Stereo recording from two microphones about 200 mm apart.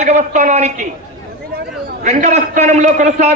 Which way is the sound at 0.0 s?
35° right (ahead or behind).